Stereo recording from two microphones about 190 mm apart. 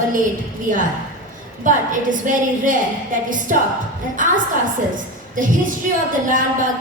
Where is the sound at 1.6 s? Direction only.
45° right (ahead or behind).